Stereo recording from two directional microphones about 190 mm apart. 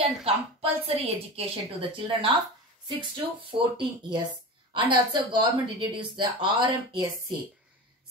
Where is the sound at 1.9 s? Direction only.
30° right (ahead or behind).